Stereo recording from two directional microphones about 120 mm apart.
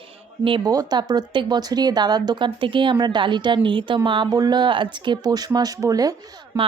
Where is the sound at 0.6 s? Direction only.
35° right (ahead or behind).